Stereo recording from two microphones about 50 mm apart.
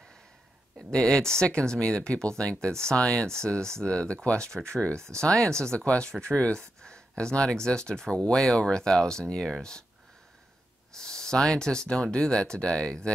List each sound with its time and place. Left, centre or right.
0.9 s speech: centre
11.0 s speech: centre